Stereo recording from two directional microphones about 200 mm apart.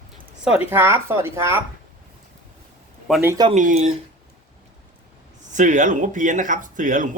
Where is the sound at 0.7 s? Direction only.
10° right (ahead or behind).